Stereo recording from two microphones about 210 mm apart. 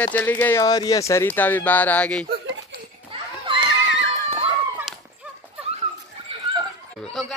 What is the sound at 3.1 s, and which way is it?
Children playing, 25° right (ahead or behind).